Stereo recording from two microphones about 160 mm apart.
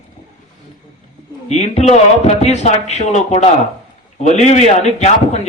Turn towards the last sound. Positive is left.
turn(degrees=40)  # may be behind; listen again after turning